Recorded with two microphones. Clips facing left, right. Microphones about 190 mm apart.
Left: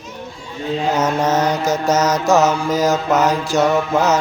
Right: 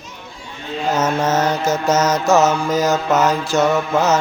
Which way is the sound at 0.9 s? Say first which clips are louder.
Right 1 dB; 15° left (ahead or behind).